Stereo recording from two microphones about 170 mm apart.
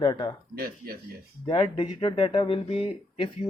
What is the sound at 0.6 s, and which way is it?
Speech, 60° right (ahead or behind).